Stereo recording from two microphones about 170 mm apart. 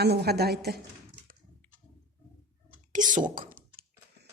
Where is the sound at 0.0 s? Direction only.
70° right (ahead or behind).